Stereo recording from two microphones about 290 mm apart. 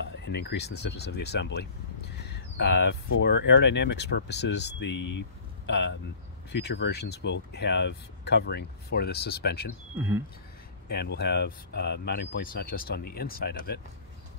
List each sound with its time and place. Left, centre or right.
0.2 s speech: left
4.9 s speech: left
5.7 s speech: left
9.9 s speech: centre
10.9 s speech: left